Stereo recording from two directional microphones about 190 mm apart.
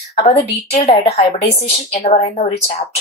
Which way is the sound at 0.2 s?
35° left (ahead or behind).